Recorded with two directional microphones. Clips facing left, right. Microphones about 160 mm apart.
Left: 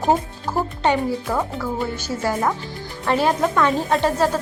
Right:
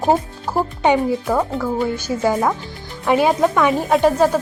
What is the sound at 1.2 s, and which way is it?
Speech, 10° right (ahead or behind).